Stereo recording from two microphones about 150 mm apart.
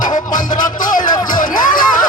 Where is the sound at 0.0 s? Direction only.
60° left (ahead or behind).